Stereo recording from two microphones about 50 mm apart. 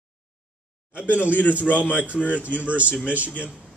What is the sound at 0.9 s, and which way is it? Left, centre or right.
Speech, left.